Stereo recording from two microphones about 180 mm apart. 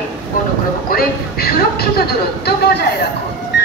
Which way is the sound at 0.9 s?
60° left (ahead or behind).